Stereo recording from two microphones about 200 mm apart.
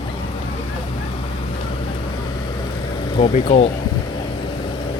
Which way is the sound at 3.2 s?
30° left (ahead or behind).